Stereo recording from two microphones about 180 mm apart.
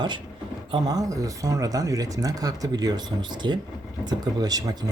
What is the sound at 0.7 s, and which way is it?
Speech, 20° right (ahead or behind).